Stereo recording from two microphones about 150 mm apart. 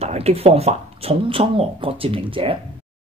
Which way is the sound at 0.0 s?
45° right (ahead or behind).